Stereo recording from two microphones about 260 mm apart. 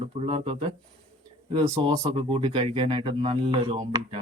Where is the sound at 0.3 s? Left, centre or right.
Right.